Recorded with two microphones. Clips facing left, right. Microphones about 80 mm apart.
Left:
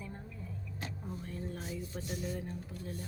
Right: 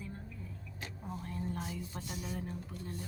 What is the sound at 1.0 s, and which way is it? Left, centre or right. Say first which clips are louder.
A woman's voice: right 4 dB; centre.